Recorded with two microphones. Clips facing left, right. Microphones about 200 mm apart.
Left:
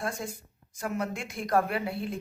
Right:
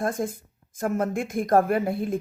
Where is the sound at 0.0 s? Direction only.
50° right (ahead or behind).